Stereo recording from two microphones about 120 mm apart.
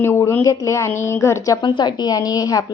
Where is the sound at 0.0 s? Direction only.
20° left (ahead or behind).